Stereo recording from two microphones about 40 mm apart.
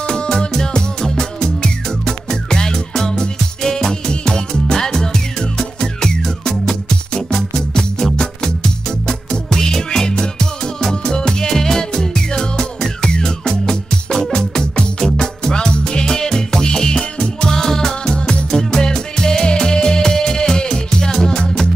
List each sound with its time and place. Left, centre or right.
0.0 s music: centre
18.1 s music: left
18.5 s music: centre